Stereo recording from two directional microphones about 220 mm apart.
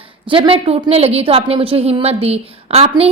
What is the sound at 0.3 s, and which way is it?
A woman's voice, 25° right (ahead or behind).